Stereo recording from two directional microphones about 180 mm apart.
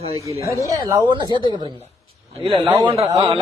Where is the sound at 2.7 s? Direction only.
25° right (ahead or behind).